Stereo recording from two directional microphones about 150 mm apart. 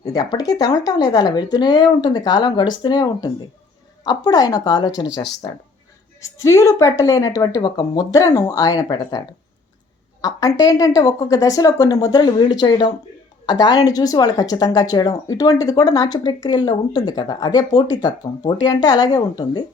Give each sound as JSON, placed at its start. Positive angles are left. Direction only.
{"t": 0.0, "sound": "speech", "side_deg": 25}
{"t": 6.2, "sound": "speech", "side_deg": 20}